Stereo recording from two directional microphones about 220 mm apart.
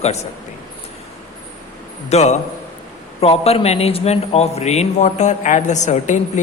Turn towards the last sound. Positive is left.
turn(degrees=35)  # may be behind; listen again after turning